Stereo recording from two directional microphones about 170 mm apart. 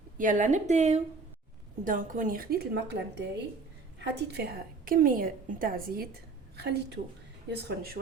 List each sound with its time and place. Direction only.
0.2 s a woman's voice: 50° right (ahead or behind)
6.6 s speech: 75° right (ahead or behind)
7.5 s speech: 65° right (ahead or behind)